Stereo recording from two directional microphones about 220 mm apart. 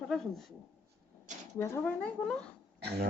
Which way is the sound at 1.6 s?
10° left (ahead or behind).